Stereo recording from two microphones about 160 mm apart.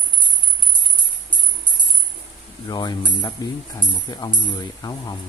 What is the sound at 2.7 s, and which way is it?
Jingle bell, 25° left (ahead or behind).